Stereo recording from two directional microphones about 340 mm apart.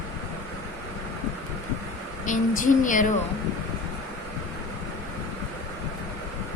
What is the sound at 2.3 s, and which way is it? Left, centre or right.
Music, left.